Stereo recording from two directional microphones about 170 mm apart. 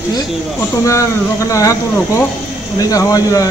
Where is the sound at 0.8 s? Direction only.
20° left (ahead or behind).